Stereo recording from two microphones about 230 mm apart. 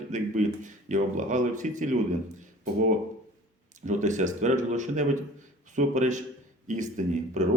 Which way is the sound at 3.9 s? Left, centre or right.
Right.